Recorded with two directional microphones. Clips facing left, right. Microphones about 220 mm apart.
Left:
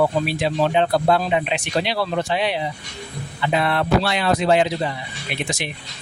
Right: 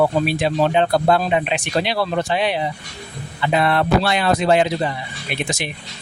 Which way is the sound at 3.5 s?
50° right (ahead or behind).